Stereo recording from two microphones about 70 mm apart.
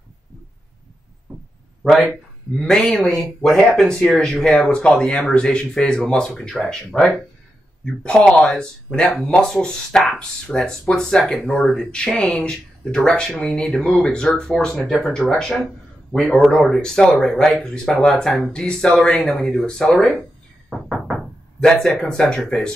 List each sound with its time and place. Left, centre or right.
1.3 s a sound: centre
1.8 s speech: centre
7.8 s speech: centre
21.5 s speech: centre